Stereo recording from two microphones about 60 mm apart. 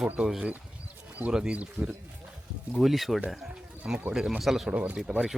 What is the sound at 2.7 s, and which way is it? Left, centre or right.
Speech, centre.